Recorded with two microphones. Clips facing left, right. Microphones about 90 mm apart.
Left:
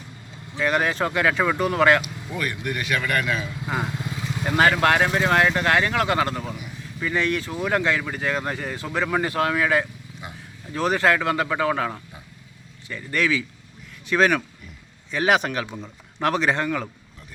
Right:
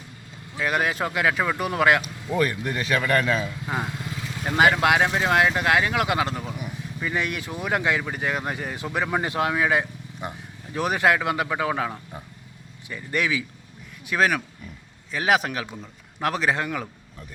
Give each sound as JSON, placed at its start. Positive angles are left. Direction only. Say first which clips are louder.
{"t": 0.5, "sound": "speech", "louder": "left 2 dB", "side_deg": -5}
{"t": 2.3, "sound": "speech", "louder": "right 4 dB", "side_deg": -30}
{"t": 3.7, "sound": "speech", "louder": "left 3 dB", "side_deg": 0}
{"t": 4.4, "sound": "speech", "louder": "even", "side_deg": -10}
{"t": 14.1, "sound": "a man's voice", "louder": "left 3 dB", "side_deg": -5}